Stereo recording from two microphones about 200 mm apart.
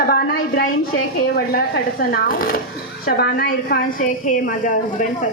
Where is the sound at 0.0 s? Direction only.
50° left (ahead or behind).